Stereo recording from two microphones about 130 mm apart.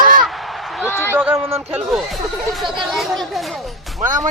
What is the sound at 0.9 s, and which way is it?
Speech, 15° left (ahead or behind).